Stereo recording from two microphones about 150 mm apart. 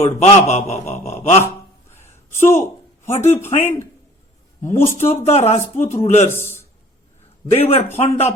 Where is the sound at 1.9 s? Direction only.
15° left (ahead or behind).